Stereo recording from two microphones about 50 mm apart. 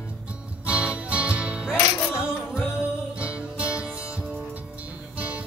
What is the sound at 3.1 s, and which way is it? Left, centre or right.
Music, right.